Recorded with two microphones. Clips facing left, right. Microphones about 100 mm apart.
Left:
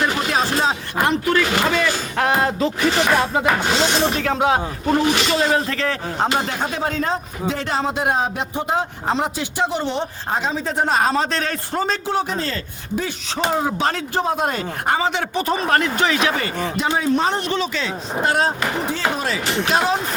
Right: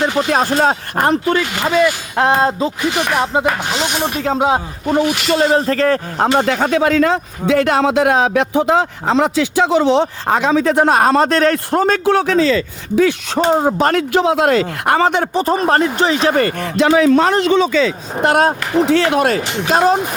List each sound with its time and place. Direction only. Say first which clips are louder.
0.3 s speech: right 5 dB; 50° right (ahead or behind)
1.2 s speech: right 1 dB; 25° right (ahead or behind)
5.3 s speech: right 5 dB; 40° right (ahead or behind)
6.4 s speech: right 9 dB; 80° right
13.5 s speech: right 6 dB; 40° right (ahead or behind)
13.9 s speech: right 8 dB; 90° right; by 15.2 s 60° right (ahead or behind)
15.2 s speech: right 6 dB; 40° right (ahead or behind)
16.3 s speech: right 7 dB; 55° right (ahead or behind); by 17.5 s 90° right
18.2 s speech: right 6 dB; 55° right (ahead or behind)
18.9 s speech: right 9 dB; 75° right (ahead or behind); by 19.8 s 55° right (ahead or behind)